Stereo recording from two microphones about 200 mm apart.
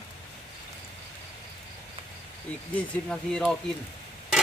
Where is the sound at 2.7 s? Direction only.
5° left (ahead or behind).